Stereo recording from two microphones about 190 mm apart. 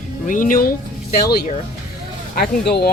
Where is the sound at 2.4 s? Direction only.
55° left (ahead or behind).